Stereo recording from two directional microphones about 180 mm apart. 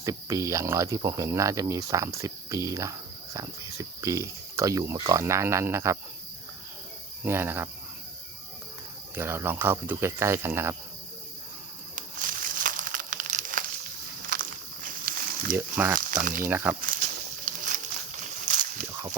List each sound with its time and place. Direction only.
0.0 s speech: 20° right (ahead or behind)
7.3 s speech: 15° right (ahead or behind)
9.1 s speech: 15° right (ahead or behind)
11.9 s crushing: 50° right (ahead or behind)
14.3 s walk: 50° right (ahead or behind)
15.5 s speech: 10° right (ahead or behind)
16.0 s speech: 50° right (ahead or behind)
16.4 s speech: 10° right (ahead or behind)
18.2 s a sound: 45° right (ahead or behind)